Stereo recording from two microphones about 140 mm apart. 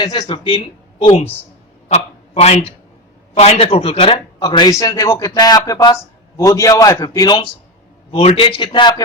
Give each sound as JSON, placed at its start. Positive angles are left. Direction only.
{"t": 0.0, "sound": "speech", "side_deg": 35}
{"t": 1.9, "sound": "a sound", "side_deg": 50}
{"t": 3.3, "sound": "speech", "side_deg": 50}
{"t": 4.4, "sound": "a man's voice", "side_deg": 30}
{"t": 8.1, "sound": "speech", "side_deg": 45}